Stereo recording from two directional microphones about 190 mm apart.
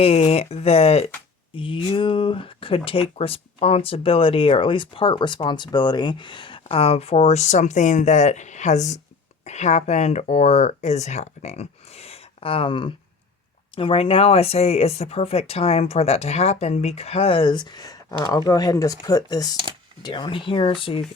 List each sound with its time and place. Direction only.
0.0 s speech: 30° left (ahead or behind)